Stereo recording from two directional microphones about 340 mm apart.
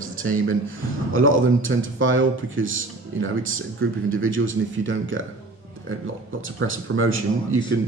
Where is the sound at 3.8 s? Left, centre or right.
Right.